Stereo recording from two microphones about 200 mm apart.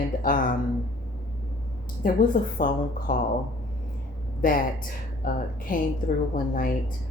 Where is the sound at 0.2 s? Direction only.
45° left (ahead or behind).